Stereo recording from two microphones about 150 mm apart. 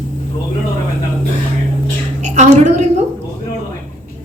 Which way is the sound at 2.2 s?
50° right (ahead or behind).